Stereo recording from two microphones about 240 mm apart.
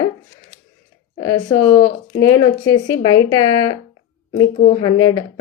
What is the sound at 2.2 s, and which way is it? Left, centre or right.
A woman's voice, centre.